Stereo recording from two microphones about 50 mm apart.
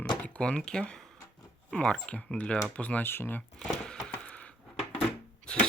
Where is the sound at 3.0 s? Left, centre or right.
Left.